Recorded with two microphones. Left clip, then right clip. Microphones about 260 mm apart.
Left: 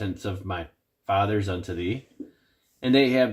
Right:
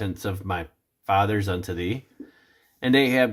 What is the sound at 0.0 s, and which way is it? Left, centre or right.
Speech, right.